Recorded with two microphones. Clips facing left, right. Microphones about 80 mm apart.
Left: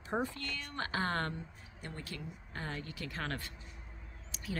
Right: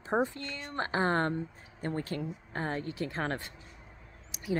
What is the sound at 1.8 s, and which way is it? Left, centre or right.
Speech, right.